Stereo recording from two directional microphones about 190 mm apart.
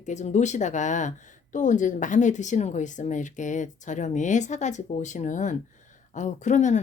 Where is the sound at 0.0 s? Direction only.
40° left (ahead or behind).